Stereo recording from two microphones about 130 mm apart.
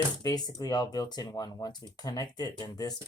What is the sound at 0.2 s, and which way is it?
Speech, 30° left (ahead or behind).